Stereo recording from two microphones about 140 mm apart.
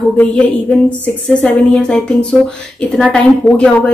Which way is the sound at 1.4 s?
5° left (ahead or behind).